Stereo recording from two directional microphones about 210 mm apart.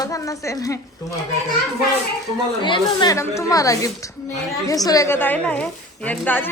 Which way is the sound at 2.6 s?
20° left (ahead or behind).